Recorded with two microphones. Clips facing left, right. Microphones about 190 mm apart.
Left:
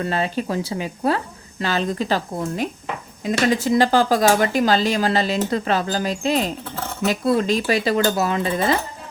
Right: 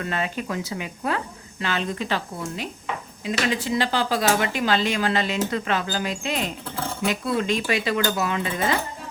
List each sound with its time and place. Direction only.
0.0 s speech: 30° left (ahead or behind)